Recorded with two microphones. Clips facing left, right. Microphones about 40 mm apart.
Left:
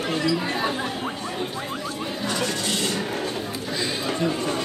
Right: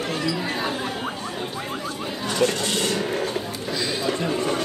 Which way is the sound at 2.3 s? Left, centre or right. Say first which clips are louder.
Right 6 dB; right.